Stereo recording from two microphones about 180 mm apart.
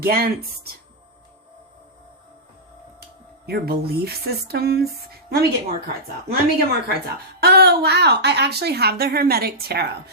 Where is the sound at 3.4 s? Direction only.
60° right (ahead or behind).